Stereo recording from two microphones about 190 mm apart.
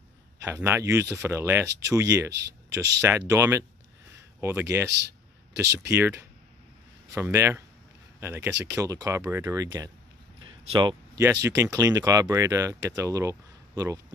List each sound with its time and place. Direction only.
0.4 s speech: 15° right (ahead or behind)